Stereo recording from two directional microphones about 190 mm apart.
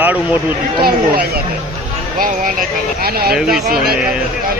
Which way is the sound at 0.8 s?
55° right (ahead or behind).